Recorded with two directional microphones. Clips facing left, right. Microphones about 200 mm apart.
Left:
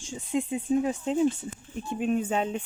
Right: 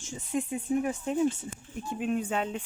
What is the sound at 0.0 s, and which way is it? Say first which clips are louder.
Speech: left 3 dB; 15° left (ahead or behind).